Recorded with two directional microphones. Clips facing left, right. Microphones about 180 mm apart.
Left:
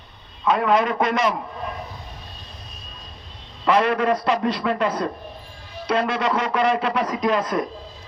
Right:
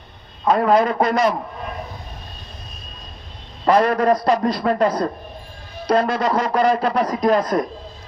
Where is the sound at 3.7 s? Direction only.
40° right (ahead or behind).